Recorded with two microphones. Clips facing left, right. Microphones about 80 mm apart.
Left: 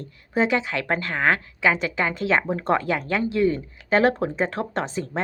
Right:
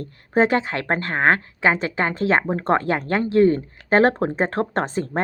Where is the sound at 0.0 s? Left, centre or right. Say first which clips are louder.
Right 4 dB; right.